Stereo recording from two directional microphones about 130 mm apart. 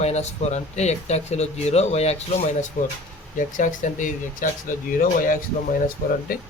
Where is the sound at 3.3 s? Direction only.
85° left.